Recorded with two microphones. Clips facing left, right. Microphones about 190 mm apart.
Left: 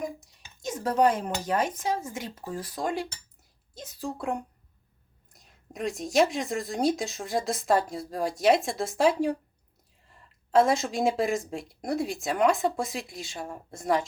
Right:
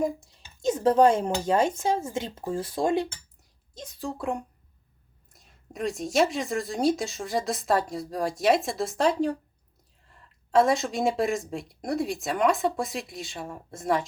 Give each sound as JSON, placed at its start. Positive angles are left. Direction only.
{"t": 0.0, "sound": "speech", "side_deg": -25}
{"t": 3.8, "sound": "speech", "side_deg": 5}
{"t": 10.5, "sound": "speech", "side_deg": 0}